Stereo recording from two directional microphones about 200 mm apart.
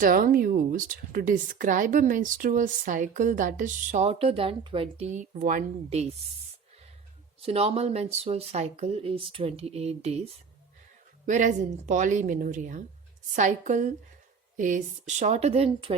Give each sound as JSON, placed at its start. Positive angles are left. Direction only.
{"t": 0.0, "sound": "speech", "side_deg": -45}
{"t": 7.4, "sound": "speech", "side_deg": -30}
{"t": 11.3, "sound": "speech", "side_deg": -40}